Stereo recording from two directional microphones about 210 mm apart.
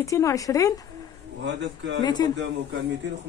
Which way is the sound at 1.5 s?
60° right (ahead or behind).